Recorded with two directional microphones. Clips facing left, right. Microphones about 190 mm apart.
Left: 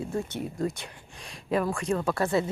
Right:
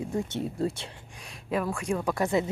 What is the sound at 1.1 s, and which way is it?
Speech, 5° right (ahead or behind).